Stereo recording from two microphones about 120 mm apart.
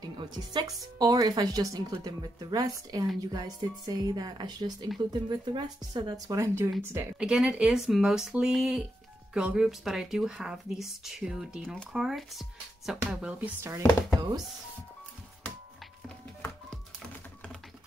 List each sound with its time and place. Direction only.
0.2 s speech: 40° right (ahead or behind)
6.2 s speech: 25° right (ahead or behind)
7.2 s speech: 5° right (ahead or behind)